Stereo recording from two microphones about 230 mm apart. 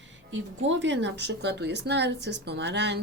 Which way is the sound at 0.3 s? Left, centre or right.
Right.